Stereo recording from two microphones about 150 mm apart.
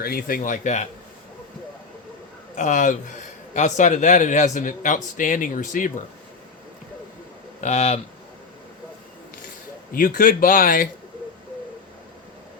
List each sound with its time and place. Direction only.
0.0 s a man's voice: 80° left; by 0.9 s 55° left (ahead or behind)
2.6 s a man's voice: 55° left (ahead or behind)
7.6 s speech: 45° left (ahead or behind)
9.9 s speech: 70° left (ahead or behind)